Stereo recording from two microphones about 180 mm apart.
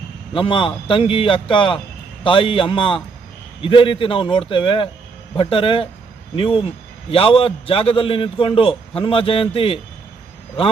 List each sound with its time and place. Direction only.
0.3 s a man's voice: 30° left (ahead or behind)